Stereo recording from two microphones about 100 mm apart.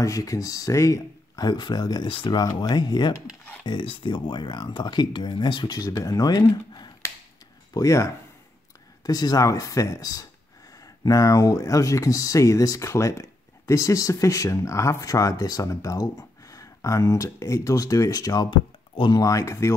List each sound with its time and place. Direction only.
0.0 s speech: 35° left (ahead or behind)
2.0 s speech: 50° left (ahead or behind)
2.4 s speech: 40° left (ahead or behind)
3.6 s speech: 55° left (ahead or behind)
7.7 s speech: 30° left (ahead or behind); by 19.1 s 50° left (ahead or behind)
19.1 s speech: 35° left (ahead or behind)